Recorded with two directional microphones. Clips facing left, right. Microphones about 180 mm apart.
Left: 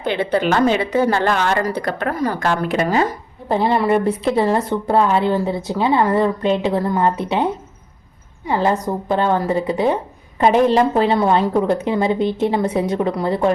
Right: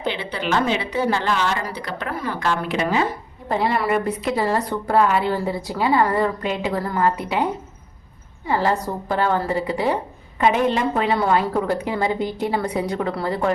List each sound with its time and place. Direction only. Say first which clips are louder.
0.0 s a woman's voice: left 7 dB; 50° left (ahead or behind)
3.5 s a woman's voice: left 4 dB; 25° left (ahead or behind)
8.4 s a woman's voice: left 3 dB; 20° left (ahead or behind)
10.4 s a woman's voice: left 5 dB; 35° left (ahead or behind)